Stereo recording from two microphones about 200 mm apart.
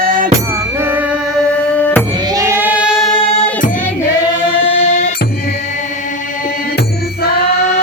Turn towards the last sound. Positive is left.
turn(degrees=50)  # may be behind; listen again after turning